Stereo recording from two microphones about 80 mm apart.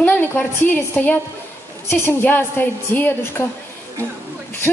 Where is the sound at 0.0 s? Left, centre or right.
Left.